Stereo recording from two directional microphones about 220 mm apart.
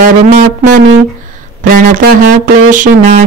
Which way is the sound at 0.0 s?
35° right (ahead or behind).